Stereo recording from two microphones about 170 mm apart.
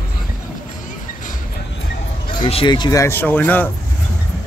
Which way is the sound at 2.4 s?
30° left (ahead or behind).